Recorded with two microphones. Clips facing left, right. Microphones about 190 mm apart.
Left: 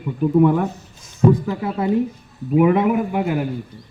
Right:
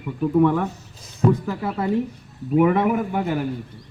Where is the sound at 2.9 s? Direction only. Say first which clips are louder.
Left 3 dB; 5° left (ahead or behind).